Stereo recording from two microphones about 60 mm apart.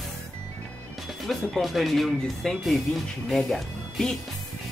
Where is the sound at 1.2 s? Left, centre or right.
Centre.